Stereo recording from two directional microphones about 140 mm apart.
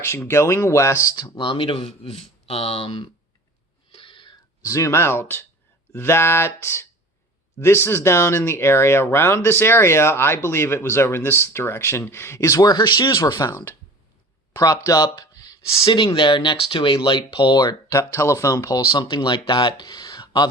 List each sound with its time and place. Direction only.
0.0 s speech: 20° left (ahead or behind); by 3.1 s 40° left (ahead or behind)
3.9 s a sound: 35° left (ahead or behind)
4.7 s speech: 20° left (ahead or behind)
13.5 s speech: 15° left (ahead or behind)
18.1 s speech: 20° left (ahead or behind)